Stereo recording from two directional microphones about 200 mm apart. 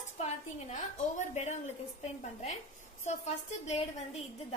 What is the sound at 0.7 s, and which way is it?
A woman's voice, 35° left (ahead or behind).